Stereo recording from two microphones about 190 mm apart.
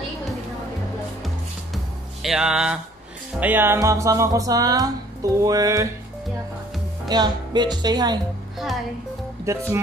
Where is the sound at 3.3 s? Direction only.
10° right (ahead or behind).